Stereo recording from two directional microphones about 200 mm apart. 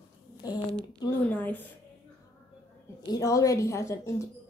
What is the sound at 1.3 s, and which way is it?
Speech, 10° left (ahead or behind).